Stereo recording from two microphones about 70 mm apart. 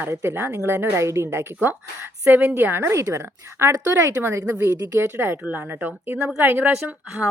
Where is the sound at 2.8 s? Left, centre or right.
Right.